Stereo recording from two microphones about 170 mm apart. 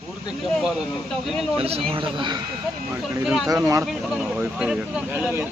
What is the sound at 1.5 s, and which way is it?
Speech, 35° right (ahead or behind).